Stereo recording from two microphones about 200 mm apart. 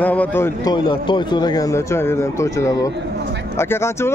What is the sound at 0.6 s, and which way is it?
Speech, 20° left (ahead or behind).